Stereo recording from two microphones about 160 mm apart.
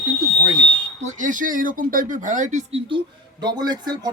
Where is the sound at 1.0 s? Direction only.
55° right (ahead or behind).